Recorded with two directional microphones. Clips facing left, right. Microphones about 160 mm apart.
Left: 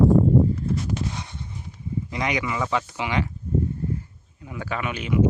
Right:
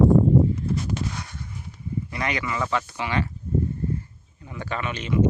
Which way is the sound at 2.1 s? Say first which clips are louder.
Left 2 dB; 15° left (ahead or behind).